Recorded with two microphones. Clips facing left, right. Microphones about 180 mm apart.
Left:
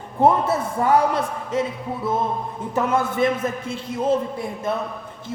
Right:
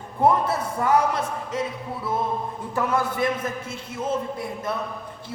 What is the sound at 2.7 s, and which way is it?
A man's voice, 20° left (ahead or behind).